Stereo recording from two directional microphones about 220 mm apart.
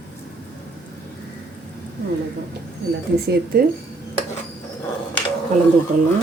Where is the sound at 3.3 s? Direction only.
45° right (ahead or behind).